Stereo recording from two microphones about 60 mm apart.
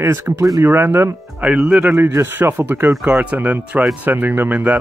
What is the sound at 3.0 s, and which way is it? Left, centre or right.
Speech, right.